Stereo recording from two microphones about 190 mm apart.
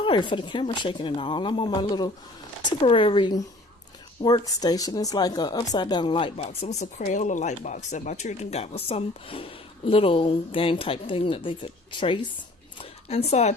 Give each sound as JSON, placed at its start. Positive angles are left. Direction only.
{"t": 0.0, "sound": "speech", "side_deg": 25}